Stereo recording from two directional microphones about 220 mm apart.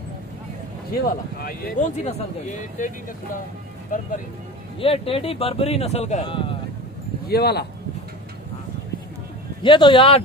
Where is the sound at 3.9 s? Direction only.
35° left (ahead or behind).